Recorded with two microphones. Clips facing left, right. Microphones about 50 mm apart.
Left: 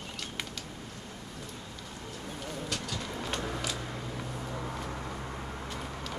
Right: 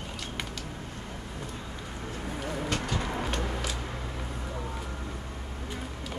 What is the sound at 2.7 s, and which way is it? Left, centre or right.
Vehicle, right.